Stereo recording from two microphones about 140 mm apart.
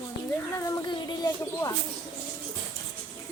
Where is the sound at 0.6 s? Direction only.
30° left (ahead or behind).